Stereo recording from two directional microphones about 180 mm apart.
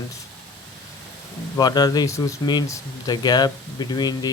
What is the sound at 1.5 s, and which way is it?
Speech, 20° left (ahead or behind).